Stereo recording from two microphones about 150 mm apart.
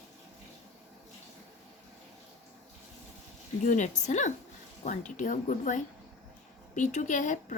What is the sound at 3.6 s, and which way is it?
A woman's voice, 55° left (ahead or behind).